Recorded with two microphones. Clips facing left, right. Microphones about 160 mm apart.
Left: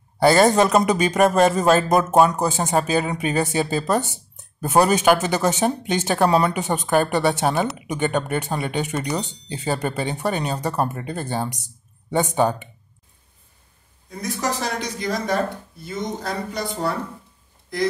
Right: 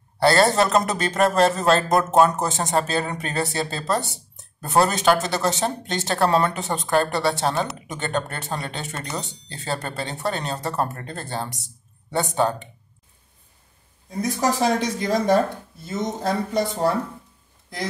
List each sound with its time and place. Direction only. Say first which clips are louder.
0.2 s speech: left 3 dB; 15° left (ahead or behind)
2.3 s speech: left 2 dB; centre (ahead or behind); by 7.5 s 20° left (ahead or behind)
7.5 s speech: left 3 dB; centre (ahead or behind)
7.9 s speech: left 5 dB; 15° left (ahead or behind)
8.9 s speech: left 6 dB; centre (ahead or behind)
9.5 s speech: left 5 dB; 15° left (ahead or behind)
14.8 s speech: right 3 dB; 25° right (ahead or behind)